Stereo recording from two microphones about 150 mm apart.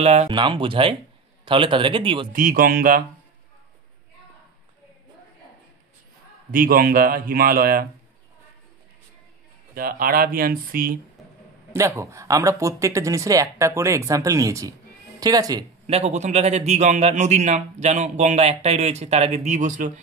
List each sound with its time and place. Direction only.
0.0 s a man's voice: 45° right (ahead or behind)
0.3 s speech: 35° right (ahead or behind)
2.3 s speech: 70° right (ahead or behind)
6.5 s speech: 75° right (ahead or behind)
9.8 s speech: 75° right (ahead or behind)
11.7 s speech: 20° right (ahead or behind)
15.9 s a man's voice: 45° right (ahead or behind)